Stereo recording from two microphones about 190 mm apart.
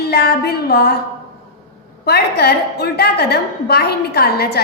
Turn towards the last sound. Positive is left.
turn(degrees=55)  # may be behind; listen again after turning